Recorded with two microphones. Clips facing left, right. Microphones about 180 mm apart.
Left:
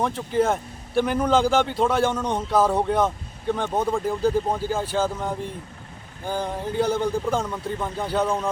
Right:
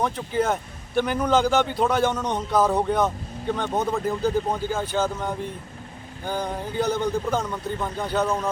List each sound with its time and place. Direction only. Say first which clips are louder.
0.0 s a man's voice: left 2 dB; 5° left (ahead or behind)